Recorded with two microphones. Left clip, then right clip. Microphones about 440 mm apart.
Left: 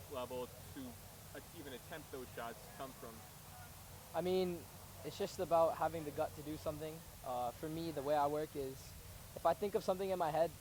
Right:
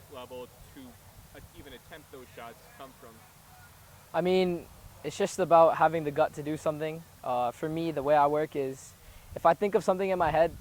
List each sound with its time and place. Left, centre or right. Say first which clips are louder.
0.1 s speech: right 2 dB; centre
2.4 s speech: right 3 dB; centre
4.1 s speech: right 11 dB; right